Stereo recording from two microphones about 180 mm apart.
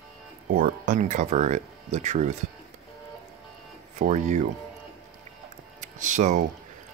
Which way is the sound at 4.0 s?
40° right (ahead or behind).